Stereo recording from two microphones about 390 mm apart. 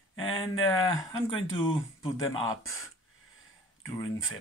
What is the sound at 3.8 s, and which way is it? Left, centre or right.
Speech, centre.